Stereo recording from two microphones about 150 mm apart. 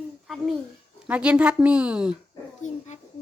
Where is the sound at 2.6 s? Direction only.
55° left (ahead or behind).